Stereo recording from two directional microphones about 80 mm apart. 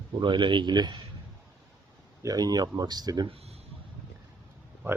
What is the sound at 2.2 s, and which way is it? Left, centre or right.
Speech, right.